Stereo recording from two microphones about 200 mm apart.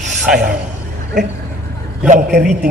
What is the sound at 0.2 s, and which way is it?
Speech, 5° right (ahead or behind).